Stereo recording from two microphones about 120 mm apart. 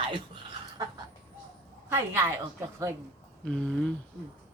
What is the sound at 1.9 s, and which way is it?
Speech, 20° right (ahead or behind).